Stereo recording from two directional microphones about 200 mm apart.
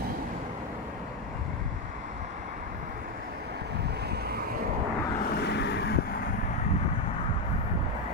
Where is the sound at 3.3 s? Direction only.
55° right (ahead or behind).